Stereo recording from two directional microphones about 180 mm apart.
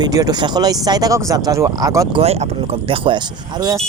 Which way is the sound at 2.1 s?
35° right (ahead or behind).